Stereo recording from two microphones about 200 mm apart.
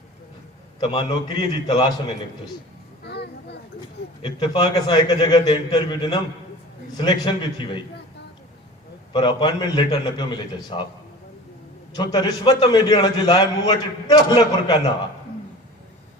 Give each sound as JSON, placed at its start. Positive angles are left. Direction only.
{"t": 0.9, "sound": "a man's voice", "side_deg": 25}
{"t": 3.0, "sound": "a sound", "side_deg": 55}
{"t": 4.2, "sound": "a man's voice", "side_deg": 20}
{"t": 9.1, "sound": "a man's voice", "side_deg": 20}
{"t": 11.9, "sound": "a man's voice", "side_deg": 20}